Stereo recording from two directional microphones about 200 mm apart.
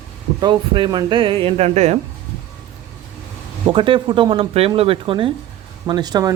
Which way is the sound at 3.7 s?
25° right (ahead or behind).